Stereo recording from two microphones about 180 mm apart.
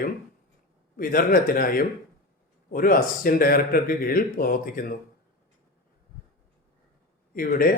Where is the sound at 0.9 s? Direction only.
50° left (ahead or behind).